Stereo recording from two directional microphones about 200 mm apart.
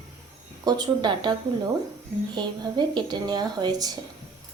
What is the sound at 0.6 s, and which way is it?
Speech, 20° right (ahead or behind).